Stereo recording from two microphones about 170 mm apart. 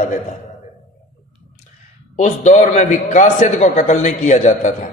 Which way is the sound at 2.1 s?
45° left (ahead or behind).